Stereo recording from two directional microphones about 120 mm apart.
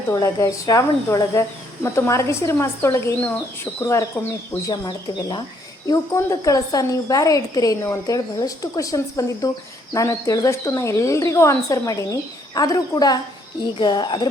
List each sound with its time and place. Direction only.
0.1 s speech: 30° left (ahead or behind)